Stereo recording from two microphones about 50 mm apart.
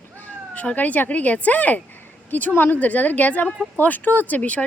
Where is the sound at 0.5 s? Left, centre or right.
Left.